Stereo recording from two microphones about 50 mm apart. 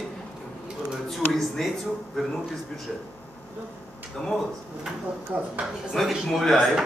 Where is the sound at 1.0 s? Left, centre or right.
Centre.